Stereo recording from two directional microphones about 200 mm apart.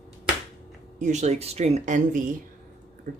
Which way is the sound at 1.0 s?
35° right (ahead or behind).